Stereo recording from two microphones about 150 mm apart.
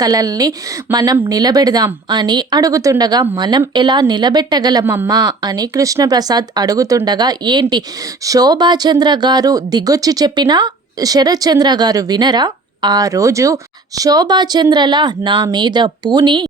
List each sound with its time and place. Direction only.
0.0 s speech: 25° right (ahead or behind)